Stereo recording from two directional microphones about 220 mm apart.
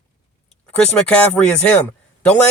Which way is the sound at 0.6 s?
5° left (ahead or behind).